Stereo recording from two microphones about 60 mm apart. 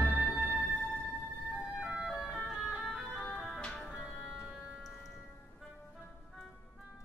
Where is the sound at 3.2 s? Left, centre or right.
Left.